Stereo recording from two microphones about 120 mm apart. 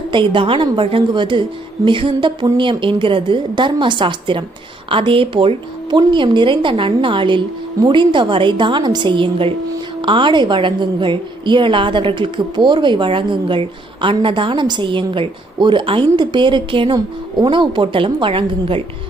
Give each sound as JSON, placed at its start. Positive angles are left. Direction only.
{"t": 0.1, "sound": "a woman's voice", "side_deg": -45}